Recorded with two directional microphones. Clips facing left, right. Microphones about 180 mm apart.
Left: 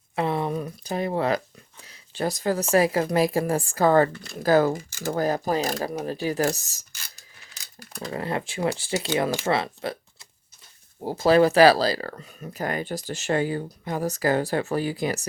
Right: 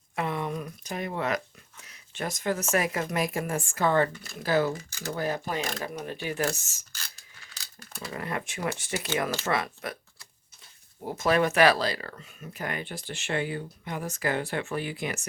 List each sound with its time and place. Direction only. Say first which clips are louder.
0.2 s a sound: left 5 dB; 30° left (ahead or behind)
1.8 s speech: left 7 dB; 30° left (ahead or behind)
4.1 s speech: left 5 dB; 5° right (ahead or behind)
4.4 s speech: left 6 dB; 45° left (ahead or behind)
8.1 s speech: left 5 dB; 30° left (ahead or behind)